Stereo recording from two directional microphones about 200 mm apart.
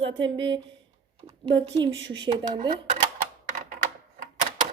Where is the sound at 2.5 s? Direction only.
25° right (ahead or behind).